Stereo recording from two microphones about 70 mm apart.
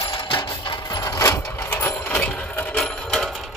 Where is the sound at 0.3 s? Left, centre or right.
Left.